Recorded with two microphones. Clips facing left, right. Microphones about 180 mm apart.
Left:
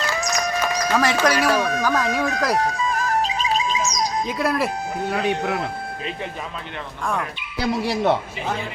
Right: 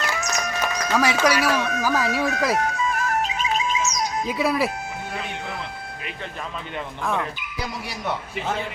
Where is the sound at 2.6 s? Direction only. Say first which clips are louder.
Left 2 dB; 35° left (ahead or behind).